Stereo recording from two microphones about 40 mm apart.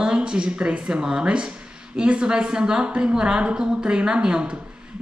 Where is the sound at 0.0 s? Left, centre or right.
Right.